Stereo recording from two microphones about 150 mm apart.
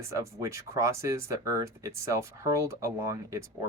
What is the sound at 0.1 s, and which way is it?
Speech, 20° right (ahead or behind).